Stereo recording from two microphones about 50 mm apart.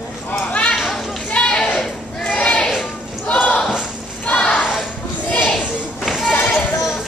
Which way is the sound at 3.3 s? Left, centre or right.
Left.